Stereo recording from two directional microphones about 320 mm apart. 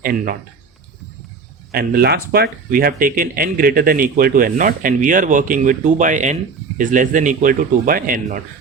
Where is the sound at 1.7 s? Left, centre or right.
Right.